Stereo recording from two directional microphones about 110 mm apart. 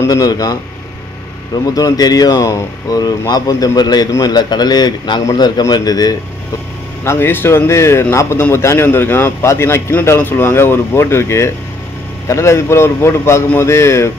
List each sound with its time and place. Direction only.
0.1 s speech: 35° left (ahead or behind)
7.1 s a man's voice: 20° left (ahead or behind)